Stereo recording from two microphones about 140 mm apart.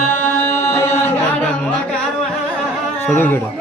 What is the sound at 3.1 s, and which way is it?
Sheep, 15° left (ahead or behind).